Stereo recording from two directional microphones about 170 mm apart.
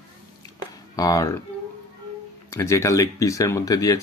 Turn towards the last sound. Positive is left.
turn(degrees=20)  # may be behind; listen again after turning